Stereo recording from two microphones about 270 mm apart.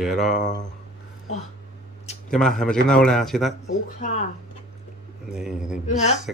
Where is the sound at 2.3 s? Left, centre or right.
Centre.